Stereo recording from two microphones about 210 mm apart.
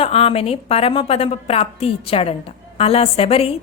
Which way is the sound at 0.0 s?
25° left (ahead or behind).